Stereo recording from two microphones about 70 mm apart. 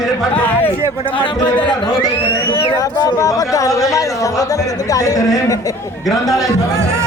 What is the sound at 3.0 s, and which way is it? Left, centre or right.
A man's voice, left.